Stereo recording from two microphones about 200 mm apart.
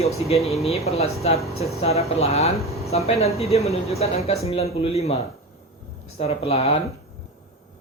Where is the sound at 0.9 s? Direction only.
30° left (ahead or behind).